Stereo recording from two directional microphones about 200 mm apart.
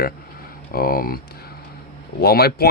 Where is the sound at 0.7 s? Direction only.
45° left (ahead or behind).